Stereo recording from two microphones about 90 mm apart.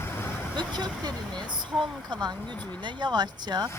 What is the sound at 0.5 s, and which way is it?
Speech, 50° right (ahead or behind).